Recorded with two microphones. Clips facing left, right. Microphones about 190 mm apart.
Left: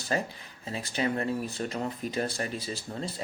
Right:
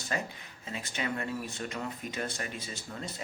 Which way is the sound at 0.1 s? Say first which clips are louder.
Left 5 dB; 35° left (ahead or behind).